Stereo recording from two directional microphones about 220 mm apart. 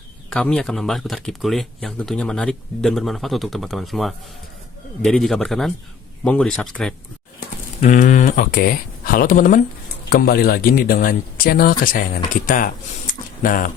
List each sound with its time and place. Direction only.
0.3 s speech: 5° left (ahead or behind)
7.3 s speech: 35° left (ahead or behind)